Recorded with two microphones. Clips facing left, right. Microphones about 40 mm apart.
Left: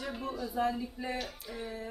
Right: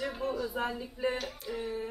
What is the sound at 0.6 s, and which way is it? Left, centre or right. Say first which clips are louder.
Speech: left 2 dB; centre.